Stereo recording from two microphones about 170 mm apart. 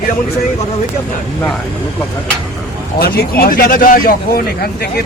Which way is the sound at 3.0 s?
65° left (ahead or behind).